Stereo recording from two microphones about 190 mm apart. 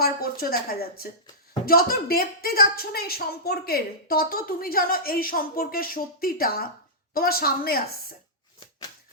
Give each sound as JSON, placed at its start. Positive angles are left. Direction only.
{"t": 0.0, "sound": "speech", "side_deg": 50}